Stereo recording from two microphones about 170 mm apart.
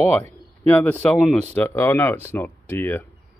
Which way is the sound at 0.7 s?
10° left (ahead or behind).